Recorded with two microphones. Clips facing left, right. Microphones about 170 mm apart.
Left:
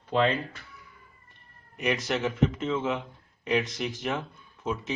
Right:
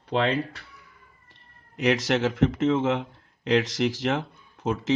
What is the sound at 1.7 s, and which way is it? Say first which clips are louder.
Speech: right 5 dB; 75° right (ahead or behind).